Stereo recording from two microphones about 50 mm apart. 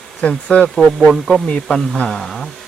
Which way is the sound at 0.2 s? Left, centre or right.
Left.